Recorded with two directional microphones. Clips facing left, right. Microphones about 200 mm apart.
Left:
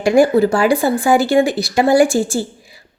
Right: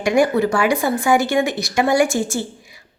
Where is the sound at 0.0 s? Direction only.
30° left (ahead or behind).